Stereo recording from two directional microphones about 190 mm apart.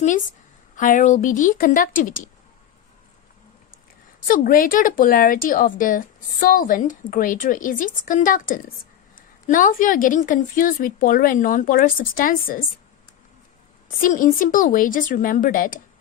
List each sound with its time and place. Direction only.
0.8 s speech: 40° left (ahead or behind)
4.3 s speech: 45° left (ahead or behind)
13.8 s speech: 45° left (ahead or behind)